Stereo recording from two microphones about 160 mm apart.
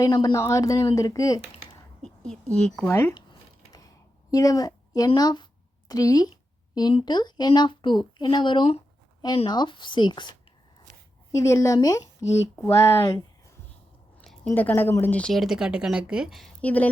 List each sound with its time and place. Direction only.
0.0 s speech: 25° left (ahead or behind)
2.0 s a woman's voice: 5° left (ahead or behind)
2.9 s speech: 15° left (ahead or behind)
3.7 s a sound: 25° left (ahead or behind)
5.9 s speech: 20° left (ahead or behind)
14.2 s speech: 5° left (ahead or behind)